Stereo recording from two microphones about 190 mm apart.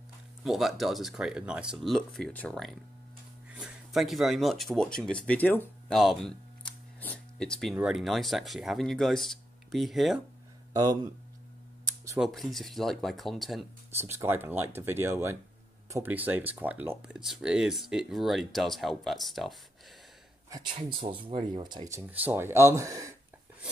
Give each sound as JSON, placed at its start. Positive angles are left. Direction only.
{"t": 0.4, "sound": "speech", "side_deg": 0}
{"t": 10.7, "sound": "speech", "side_deg": -20}
{"t": 12.2, "sound": "speech", "side_deg": 0}
{"t": 14.0, "sound": "speech", "side_deg": -10}
{"t": 20.4, "sound": "speech", "side_deg": -20}